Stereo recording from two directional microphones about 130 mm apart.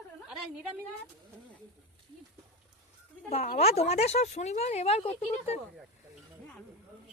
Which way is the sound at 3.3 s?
60° left (ahead or behind).